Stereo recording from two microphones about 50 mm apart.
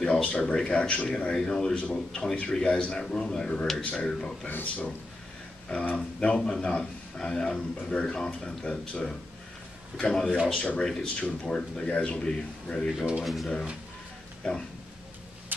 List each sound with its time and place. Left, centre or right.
0.0 s speech: left
1.1 s speech: centre
3.0 s a man's voice: centre
4.5 s speech: left
5.7 s a man's voice: left
13.2 s speech: centre
14.4 s a man's voice: centre